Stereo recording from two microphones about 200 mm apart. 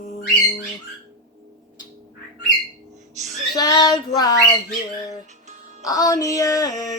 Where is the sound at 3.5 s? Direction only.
20° left (ahead or behind).